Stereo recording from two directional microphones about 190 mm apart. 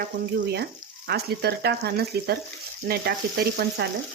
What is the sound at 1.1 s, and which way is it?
Speech, 60° right (ahead or behind).